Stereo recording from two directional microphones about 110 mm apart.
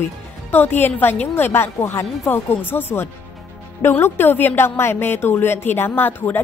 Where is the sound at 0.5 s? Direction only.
20° left (ahead or behind).